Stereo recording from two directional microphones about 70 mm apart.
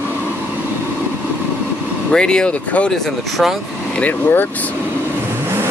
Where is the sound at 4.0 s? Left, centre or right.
Left.